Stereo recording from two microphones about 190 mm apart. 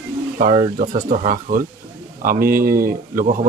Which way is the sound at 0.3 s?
35° right (ahead or behind).